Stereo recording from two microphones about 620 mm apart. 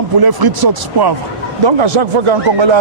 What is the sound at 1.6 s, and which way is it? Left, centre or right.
Speech, right.